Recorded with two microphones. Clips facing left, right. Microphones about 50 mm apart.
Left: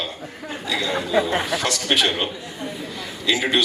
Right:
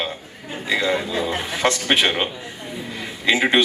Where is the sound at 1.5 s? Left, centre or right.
Right.